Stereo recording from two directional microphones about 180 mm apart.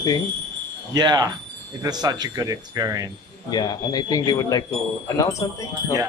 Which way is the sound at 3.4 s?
20° left (ahead or behind).